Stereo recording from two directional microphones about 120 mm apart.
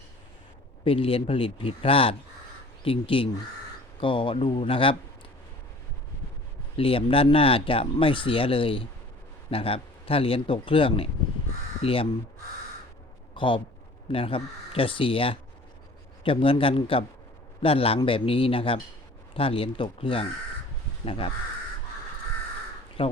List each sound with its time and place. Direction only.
0.9 s speech: 50° left (ahead or behind)
6.7 s speech: 50° left (ahead or behind)
13.3 s a man's voice: 45° left (ahead or behind)
23.0 s speech: 50° left (ahead or behind)